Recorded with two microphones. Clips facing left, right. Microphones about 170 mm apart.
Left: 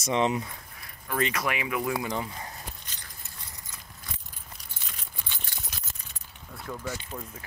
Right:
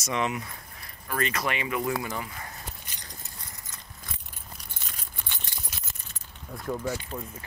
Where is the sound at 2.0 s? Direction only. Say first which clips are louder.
Left 2 dB; 20° left (ahead or behind).